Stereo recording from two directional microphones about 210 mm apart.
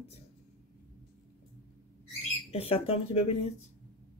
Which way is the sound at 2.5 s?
30° left (ahead or behind).